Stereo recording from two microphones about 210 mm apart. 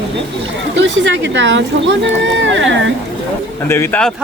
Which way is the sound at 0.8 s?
60° right (ahead or behind).